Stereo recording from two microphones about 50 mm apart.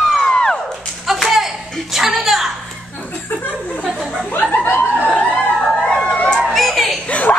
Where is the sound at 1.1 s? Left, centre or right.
Centre.